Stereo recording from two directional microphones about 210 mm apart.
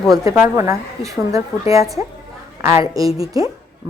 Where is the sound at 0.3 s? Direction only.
10° right (ahead or behind).